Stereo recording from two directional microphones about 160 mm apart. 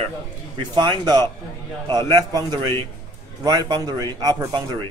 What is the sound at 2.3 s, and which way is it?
Speech, 25° right (ahead or behind).